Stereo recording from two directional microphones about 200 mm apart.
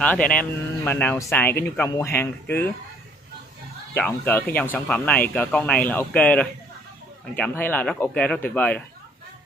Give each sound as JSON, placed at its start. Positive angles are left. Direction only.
{"t": 0.0, "sound": "speech", "side_deg": 5}
{"t": 3.9, "sound": "speech", "side_deg": 10}